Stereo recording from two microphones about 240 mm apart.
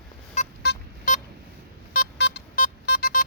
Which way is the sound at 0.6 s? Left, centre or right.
Left.